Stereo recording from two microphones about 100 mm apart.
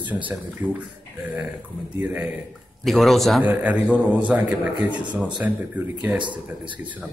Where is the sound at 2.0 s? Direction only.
20° right (ahead or behind).